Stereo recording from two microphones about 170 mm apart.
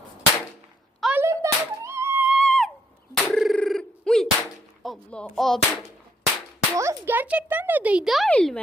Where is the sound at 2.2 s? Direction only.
Centre (ahead or behind).